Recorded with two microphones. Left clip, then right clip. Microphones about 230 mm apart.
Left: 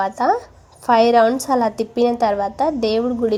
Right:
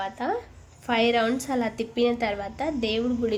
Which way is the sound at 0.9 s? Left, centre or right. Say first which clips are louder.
Left 10 dB; left.